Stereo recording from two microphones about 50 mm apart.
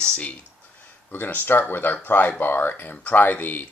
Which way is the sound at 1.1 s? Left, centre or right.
Left.